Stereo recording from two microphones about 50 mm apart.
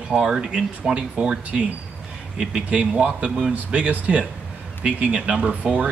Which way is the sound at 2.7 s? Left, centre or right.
Right.